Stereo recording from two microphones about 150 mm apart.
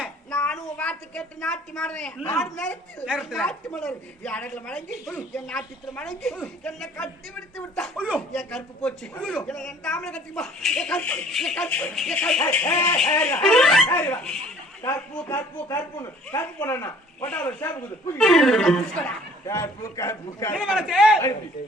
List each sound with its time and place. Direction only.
0.3 s a woman's voice: 10° left (ahead or behind)
15.1 s speech: 15° left (ahead or behind)
19.5 s a man's voice: 20° left (ahead or behind)
20.6 s speech: 5° right (ahead or behind)